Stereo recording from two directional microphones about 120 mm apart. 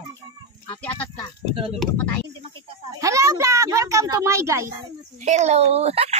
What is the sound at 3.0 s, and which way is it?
A woman's voice, 25° right (ahead or behind).